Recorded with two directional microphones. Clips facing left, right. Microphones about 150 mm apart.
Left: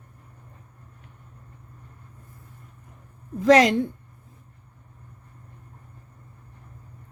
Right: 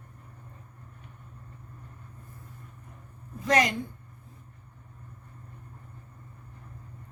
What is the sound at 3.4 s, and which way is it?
Speech, 85° left.